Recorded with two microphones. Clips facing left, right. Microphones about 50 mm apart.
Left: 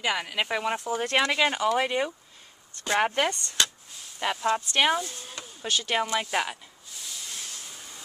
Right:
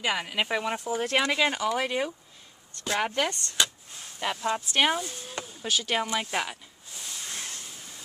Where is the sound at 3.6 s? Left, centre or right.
Centre.